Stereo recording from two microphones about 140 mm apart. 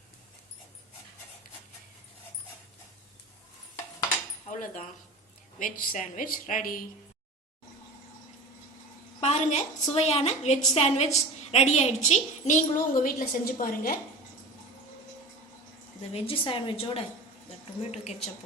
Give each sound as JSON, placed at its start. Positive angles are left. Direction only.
{"t": 4.4, "sound": "speech", "side_deg": 60}
{"t": 5.5, "sound": "a woman's voice", "side_deg": 75}
{"t": 9.2, "sound": "a woman's voice", "side_deg": 55}
{"t": 16.1, "sound": "a woman's voice", "side_deg": 40}